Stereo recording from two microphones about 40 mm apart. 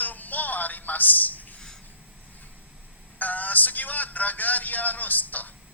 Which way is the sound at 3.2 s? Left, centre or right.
Left.